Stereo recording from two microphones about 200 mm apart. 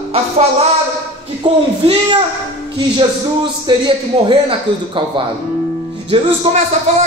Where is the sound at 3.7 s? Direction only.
20° right (ahead or behind).